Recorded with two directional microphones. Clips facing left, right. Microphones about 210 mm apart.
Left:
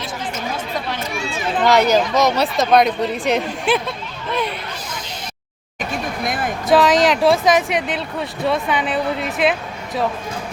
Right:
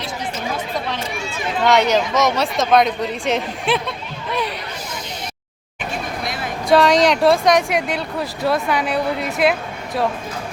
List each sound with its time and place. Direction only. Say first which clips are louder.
1.6 s speech: left 1 dB; centre (ahead or behind)
6.2 s a sound: left 4 dB; 50° left (ahead or behind)
6.7 s speech: even; centre (ahead or behind)